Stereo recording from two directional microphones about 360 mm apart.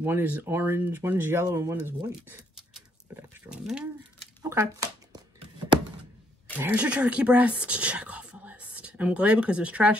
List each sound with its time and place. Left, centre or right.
0.0 s speech: centre
2.2 s a sound: centre
6.5 s speech: centre